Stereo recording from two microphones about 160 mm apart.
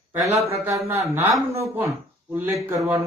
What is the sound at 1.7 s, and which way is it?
Speech, 15° right (ahead or behind).